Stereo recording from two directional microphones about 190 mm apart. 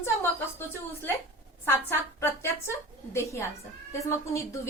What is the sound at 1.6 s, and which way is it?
A woman's voice, 10° left (ahead or behind).